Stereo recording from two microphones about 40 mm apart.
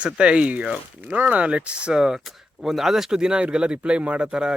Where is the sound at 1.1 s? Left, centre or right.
Right.